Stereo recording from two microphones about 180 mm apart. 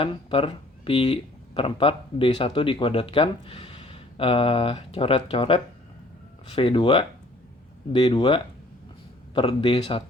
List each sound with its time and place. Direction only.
0.0 s speech: 30° left (ahead or behind)